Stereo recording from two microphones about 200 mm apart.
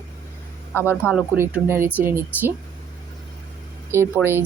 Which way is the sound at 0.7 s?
10° left (ahead or behind).